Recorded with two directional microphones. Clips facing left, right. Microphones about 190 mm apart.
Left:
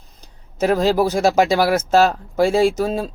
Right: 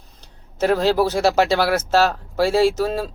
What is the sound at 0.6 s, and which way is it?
Speech, 15° left (ahead or behind).